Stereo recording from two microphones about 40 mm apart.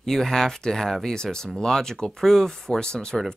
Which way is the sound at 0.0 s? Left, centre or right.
Centre.